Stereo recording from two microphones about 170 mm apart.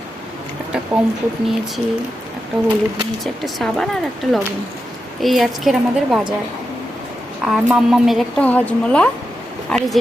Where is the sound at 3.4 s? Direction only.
Centre (ahead or behind).